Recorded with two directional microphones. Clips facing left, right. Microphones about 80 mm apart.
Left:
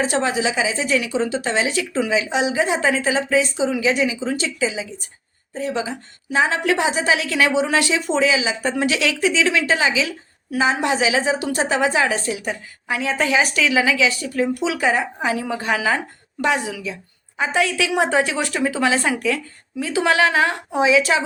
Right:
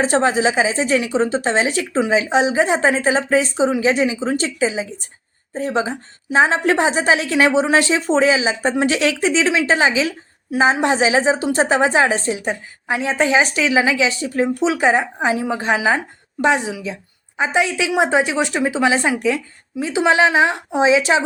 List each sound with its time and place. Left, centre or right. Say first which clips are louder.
0.0 s a woman's voice: right 4 dB; right